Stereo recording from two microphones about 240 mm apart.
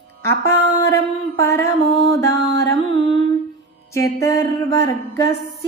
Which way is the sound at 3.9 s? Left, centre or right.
Centre.